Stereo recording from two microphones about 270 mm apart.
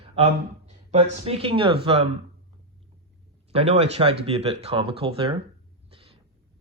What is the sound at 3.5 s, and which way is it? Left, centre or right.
Speech, right.